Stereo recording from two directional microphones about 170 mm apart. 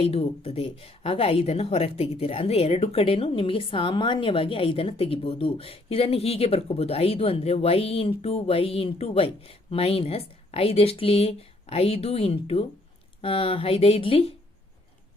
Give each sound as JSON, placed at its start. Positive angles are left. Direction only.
{"t": 0.0, "sound": "speech", "side_deg": 35}